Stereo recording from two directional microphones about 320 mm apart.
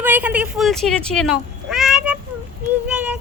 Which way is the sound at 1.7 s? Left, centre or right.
Centre.